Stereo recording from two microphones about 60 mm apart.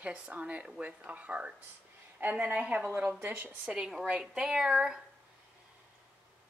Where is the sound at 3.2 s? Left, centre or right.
Right.